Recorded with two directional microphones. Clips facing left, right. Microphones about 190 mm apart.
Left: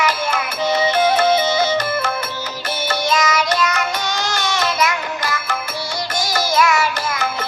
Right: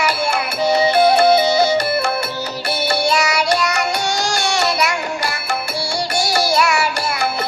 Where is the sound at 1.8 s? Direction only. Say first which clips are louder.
Right 3 dB; 10° right (ahead or behind).